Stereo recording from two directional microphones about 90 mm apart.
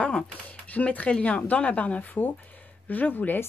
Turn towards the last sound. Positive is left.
turn(degrees=20)  # may be behind; listen again after turning